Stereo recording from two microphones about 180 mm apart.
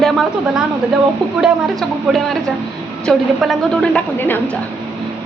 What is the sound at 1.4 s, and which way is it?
A woman's voice, centre (ahead or behind).